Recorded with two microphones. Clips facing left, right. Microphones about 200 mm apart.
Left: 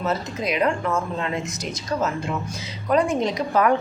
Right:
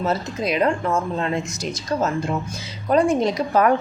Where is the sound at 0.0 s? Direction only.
30° right (ahead or behind).